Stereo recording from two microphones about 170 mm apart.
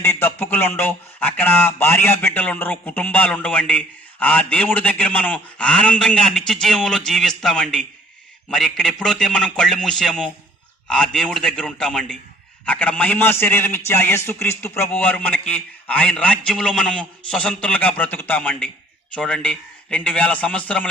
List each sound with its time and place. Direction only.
0.0 s a man's voice: 15° left (ahead or behind)